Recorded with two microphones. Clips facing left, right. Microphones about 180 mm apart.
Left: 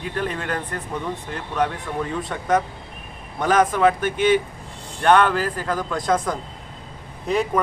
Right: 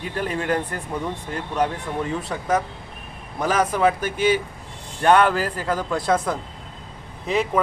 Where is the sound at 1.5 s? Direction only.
10° right (ahead or behind).